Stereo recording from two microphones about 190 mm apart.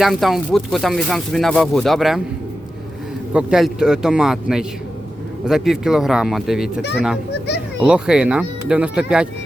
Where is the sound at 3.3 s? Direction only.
5° right (ahead or behind).